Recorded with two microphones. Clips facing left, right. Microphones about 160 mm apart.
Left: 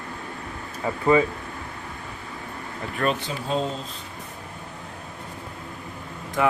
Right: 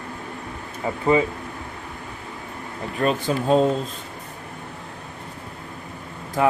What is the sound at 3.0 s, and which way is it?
Speech, 25° right (ahead or behind).